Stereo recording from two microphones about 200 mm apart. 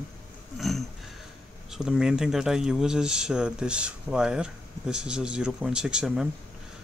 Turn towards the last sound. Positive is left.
turn(degrees=-5)  # may be behind; listen again after turning